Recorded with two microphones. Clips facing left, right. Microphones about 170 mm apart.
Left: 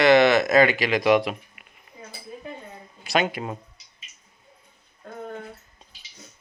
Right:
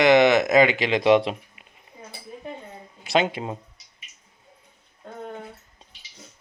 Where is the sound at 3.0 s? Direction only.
25° right (ahead or behind).